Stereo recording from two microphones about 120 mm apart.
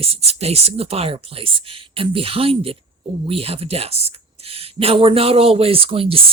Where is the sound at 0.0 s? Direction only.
55° right (ahead or behind).